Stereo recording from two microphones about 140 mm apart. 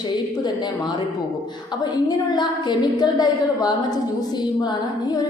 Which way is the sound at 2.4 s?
30° left (ahead or behind).